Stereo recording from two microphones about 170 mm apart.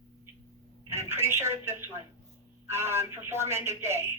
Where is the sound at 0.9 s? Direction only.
15° right (ahead or behind).